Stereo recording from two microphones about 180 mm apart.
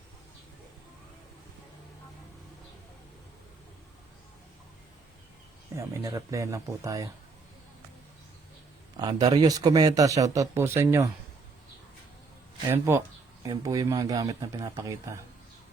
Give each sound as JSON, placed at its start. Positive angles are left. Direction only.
{"t": 5.7, "sound": "speech", "side_deg": -15}
{"t": 9.0, "sound": "speech", "side_deg": -20}
{"t": 12.6, "sound": "speech", "side_deg": -15}